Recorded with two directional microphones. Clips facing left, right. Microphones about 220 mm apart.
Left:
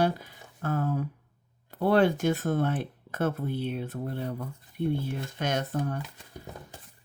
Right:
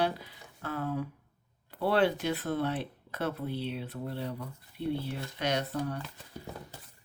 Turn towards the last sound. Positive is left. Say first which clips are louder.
# left 2 dB
turn(degrees=50)  # may be behind; listen again after turning